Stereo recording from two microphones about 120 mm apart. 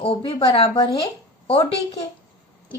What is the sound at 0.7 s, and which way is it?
Speech, 35° left (ahead or behind).